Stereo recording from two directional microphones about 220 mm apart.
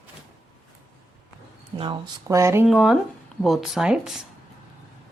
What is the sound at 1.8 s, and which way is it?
Speech, 15° right (ahead or behind).